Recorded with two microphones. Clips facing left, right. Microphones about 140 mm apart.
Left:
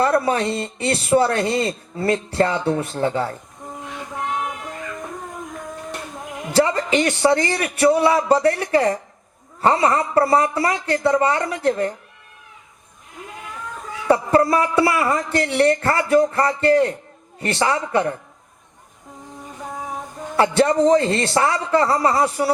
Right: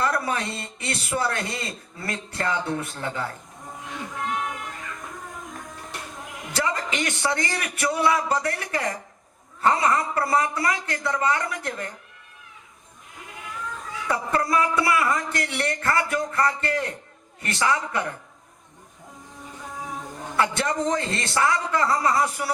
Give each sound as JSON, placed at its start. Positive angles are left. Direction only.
{"t": 0.0, "sound": "speech", "side_deg": 30}
{"t": 6.5, "sound": "speech", "side_deg": 30}
{"t": 14.1, "sound": "speech", "side_deg": 30}
{"t": 20.3, "sound": "speech", "side_deg": 30}